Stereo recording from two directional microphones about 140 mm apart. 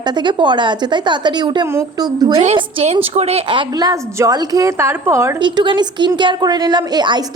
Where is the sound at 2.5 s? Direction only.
50° right (ahead or behind).